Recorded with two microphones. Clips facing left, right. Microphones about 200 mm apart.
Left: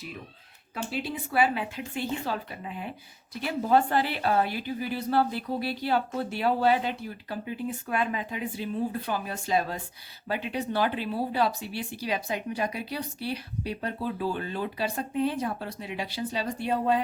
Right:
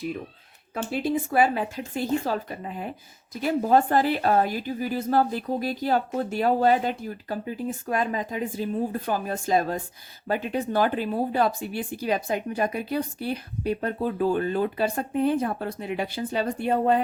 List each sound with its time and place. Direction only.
0.7 s speech: 45° right (ahead or behind)